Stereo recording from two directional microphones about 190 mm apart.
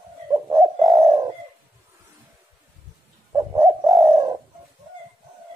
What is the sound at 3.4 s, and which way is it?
Bird, 15° right (ahead or behind).